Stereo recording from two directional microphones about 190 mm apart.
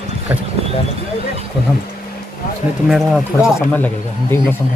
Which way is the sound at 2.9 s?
Centre (ahead or behind).